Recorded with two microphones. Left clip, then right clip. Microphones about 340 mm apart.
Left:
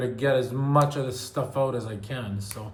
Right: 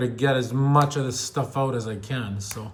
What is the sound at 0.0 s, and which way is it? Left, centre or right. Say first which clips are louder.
Speech: right 1 dB; right.